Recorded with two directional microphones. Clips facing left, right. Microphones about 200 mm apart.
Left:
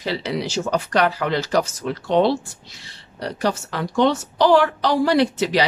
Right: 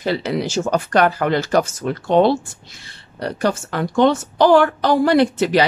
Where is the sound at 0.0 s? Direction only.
50° right (ahead or behind).